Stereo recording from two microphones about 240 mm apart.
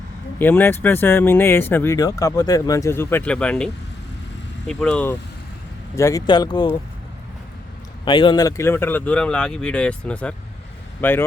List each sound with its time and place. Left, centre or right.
0.3 s speech: centre
8.0 s speech: centre